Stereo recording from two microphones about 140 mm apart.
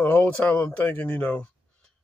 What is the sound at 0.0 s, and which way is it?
Speech, 15° left (ahead or behind).